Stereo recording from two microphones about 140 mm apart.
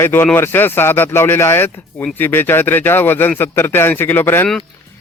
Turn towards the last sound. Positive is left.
turn(degrees=15)  # may be behind; listen again after turning